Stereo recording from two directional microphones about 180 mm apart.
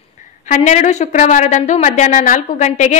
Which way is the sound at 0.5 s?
40° left (ahead or behind).